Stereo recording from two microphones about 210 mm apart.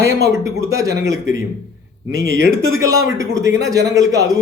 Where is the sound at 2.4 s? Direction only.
45° left (ahead or behind).